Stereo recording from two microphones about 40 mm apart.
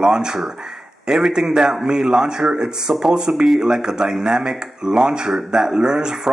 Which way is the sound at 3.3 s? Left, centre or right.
Centre.